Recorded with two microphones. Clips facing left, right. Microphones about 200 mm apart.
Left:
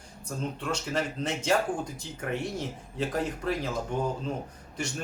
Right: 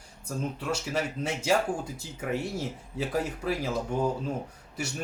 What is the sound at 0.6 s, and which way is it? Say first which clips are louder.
Speech: left 1 dB; 10° right (ahead or behind).